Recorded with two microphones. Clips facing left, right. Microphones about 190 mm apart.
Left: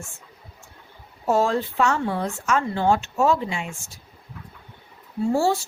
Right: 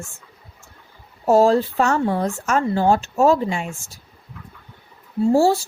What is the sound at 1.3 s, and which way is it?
Speech, 40° right (ahead or behind).